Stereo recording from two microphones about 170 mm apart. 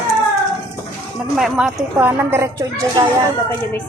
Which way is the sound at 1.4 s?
5° right (ahead or behind).